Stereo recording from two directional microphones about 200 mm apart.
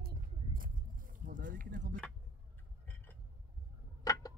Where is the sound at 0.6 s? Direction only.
45° right (ahead or behind).